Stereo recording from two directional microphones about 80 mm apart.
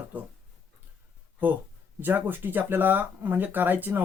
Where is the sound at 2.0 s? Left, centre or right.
Right.